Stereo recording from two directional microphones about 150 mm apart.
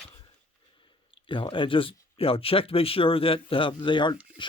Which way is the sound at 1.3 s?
35° left (ahead or behind).